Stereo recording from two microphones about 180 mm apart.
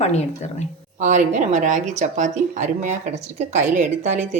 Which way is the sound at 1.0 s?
40° right (ahead or behind).